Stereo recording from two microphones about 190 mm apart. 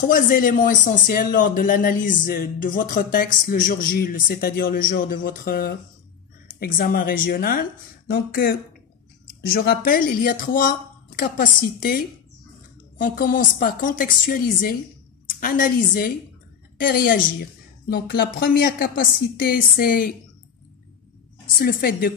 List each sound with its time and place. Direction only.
0.1 s a woman's voice: 45° left (ahead or behind)
21.5 s speech: 50° left (ahead or behind)